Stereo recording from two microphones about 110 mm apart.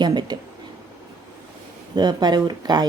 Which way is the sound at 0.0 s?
45° right (ahead or behind).